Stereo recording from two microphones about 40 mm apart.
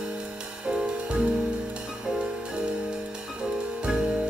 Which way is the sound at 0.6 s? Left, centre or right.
Right.